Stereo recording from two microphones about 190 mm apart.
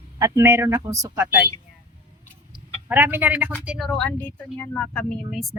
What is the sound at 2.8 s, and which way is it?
Speech, 10° right (ahead or behind).